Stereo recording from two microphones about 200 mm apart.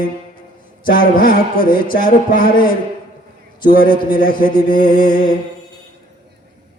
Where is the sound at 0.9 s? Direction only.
45° left (ahead or behind).